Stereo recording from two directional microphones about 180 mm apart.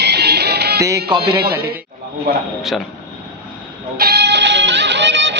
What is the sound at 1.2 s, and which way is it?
Speech, 60° right (ahead or behind).